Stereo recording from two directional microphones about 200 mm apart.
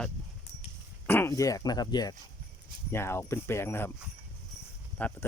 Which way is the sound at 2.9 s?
15° left (ahead or behind).